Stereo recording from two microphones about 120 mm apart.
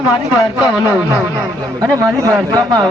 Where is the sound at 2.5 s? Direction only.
30° right (ahead or behind).